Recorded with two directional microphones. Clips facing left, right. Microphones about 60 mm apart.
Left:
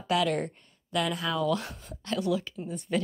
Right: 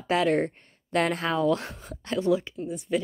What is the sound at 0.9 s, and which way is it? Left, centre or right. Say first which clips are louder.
Speech: right 4 dB; right.